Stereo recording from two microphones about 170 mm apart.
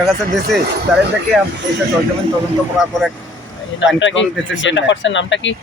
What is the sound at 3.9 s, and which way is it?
Speech, 90° left.